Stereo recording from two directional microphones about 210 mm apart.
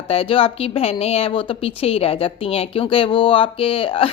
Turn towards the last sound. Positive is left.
turn(degrees=25)  # may be behind; listen again after turning